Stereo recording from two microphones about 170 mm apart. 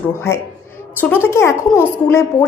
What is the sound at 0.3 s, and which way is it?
A woman's voice, 15° left (ahead or behind).